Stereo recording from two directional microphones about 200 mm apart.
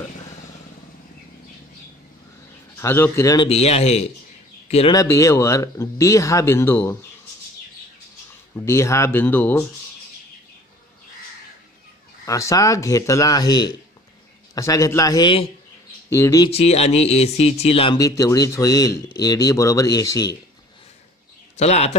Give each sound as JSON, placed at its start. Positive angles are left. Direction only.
{"t": 2.8, "sound": "speech", "side_deg": 10}
{"t": 3.4, "sound": "speech", "side_deg": 30}
{"t": 4.9, "sound": "speech", "side_deg": 15}
{"t": 8.5, "sound": "speech", "side_deg": 15}
{"t": 12.3, "sound": "speech", "side_deg": 15}
{"t": 16.4, "sound": "speech", "side_deg": 30}
{"t": 17.9, "sound": "speech", "side_deg": 15}
{"t": 21.5, "sound": "speech", "side_deg": 30}